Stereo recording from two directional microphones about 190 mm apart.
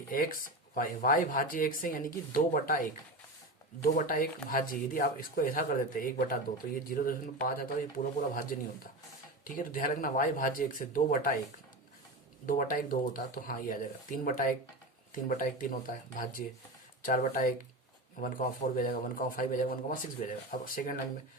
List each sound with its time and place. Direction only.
0.1 s speech: 45° left (ahead or behind)
12.5 s speech: 45° left (ahead or behind)